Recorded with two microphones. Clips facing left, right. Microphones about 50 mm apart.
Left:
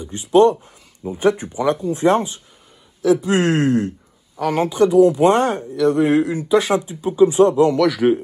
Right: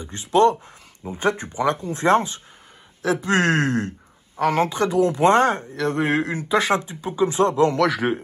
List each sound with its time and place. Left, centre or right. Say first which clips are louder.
0.0 s speech: left 4 dB; right